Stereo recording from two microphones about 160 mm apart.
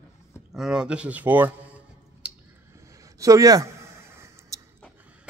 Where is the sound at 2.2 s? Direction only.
5° right (ahead or behind).